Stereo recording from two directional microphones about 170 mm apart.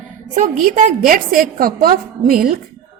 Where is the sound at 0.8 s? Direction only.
50° right (ahead or behind).